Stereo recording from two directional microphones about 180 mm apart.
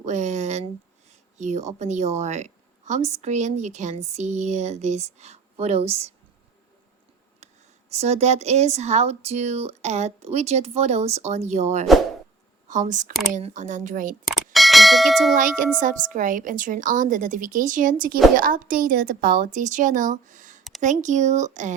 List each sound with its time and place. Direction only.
0.0 s a sound: 40° right (ahead or behind)
1.4 s a woman's voice: 40° right (ahead or behind)
7.3 s a woman's voice: 40° right (ahead or behind)
14.3 s bell: centre (ahead or behind)
15.4 s a woman's voice: 50° right (ahead or behind)